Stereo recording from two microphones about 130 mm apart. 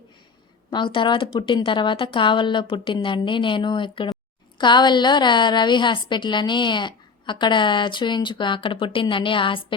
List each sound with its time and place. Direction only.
0.7 s a woman's voice: 35° left (ahead or behind)